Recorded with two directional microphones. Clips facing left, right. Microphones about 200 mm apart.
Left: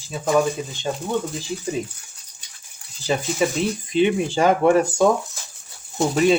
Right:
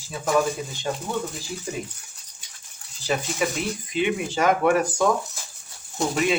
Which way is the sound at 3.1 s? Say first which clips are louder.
Left 4 dB; 30° left (ahead or behind).